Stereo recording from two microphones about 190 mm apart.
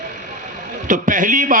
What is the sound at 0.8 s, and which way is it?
Speech, 45° right (ahead or behind).